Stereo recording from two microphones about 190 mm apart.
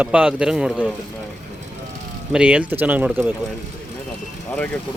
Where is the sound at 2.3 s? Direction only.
5° right (ahead or behind).